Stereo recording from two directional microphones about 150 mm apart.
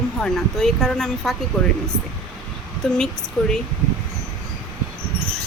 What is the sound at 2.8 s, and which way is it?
Speech, centre (ahead or behind).